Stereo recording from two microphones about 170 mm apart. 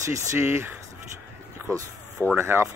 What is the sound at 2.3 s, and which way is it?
Speech, 15° right (ahead or behind).